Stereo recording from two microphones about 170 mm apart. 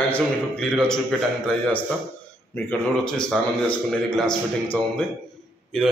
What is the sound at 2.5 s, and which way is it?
A man's voice, 5° left (ahead or behind).